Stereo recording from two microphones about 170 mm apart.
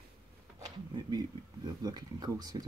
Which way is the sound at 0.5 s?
20° right (ahead or behind).